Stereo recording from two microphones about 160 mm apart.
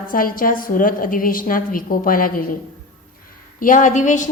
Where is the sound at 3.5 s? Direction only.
55° left (ahead or behind).